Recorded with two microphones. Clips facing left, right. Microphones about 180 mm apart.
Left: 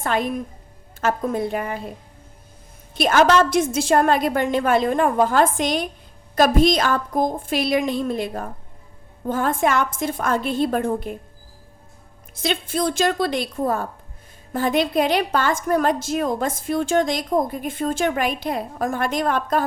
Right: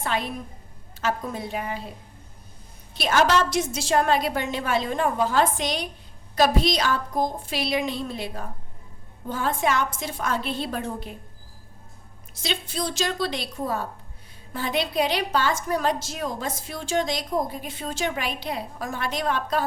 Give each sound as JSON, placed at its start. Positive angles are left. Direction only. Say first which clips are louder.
{"t": 0.0, "sound": "a woman's voice", "louder": "left 5 dB", "side_deg": 50}
{"t": 2.9, "sound": "a woman's voice", "louder": "left 5 dB", "side_deg": 50}
{"t": 12.3, "sound": "a woman's voice", "louder": "left 6 dB", "side_deg": 50}